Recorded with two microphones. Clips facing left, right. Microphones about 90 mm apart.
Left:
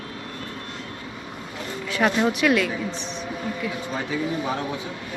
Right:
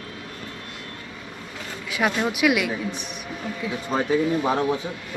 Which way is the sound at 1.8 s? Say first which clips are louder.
Left 2 dB; 5° right (ahead or behind).